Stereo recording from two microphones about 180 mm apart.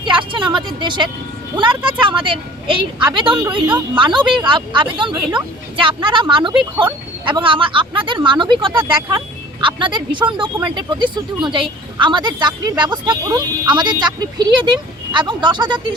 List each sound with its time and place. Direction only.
0.0 s speech: 25° right (ahead or behind)